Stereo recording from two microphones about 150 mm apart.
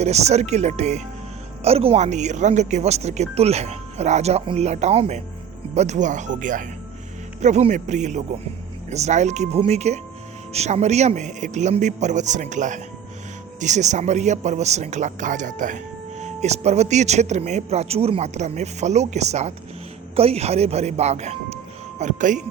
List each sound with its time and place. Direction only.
0.0 s speech: 45° right (ahead or behind)